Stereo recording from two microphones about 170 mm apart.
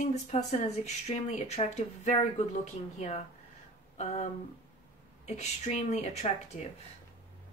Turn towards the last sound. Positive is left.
turn(degrees=45)  # may be behind; listen again after turning